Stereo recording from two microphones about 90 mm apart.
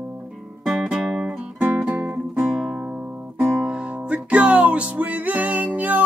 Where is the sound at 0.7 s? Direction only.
Centre (ahead or behind).